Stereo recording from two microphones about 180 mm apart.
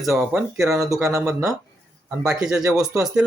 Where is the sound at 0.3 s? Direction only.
15° right (ahead or behind).